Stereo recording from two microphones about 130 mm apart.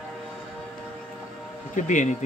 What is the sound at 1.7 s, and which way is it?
Speech, 75° left (ahead or behind).